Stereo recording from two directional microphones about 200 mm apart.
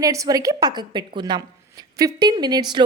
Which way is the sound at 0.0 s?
15° right (ahead or behind).